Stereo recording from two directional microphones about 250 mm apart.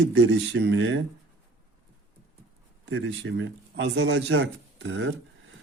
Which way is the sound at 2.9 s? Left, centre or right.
Right.